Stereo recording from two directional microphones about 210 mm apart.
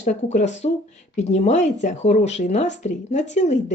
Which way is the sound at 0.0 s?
35° left (ahead or behind).